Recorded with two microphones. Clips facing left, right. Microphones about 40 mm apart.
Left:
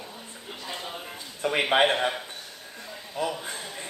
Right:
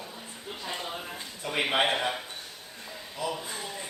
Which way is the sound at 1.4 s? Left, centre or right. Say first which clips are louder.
Left 6 dB; left.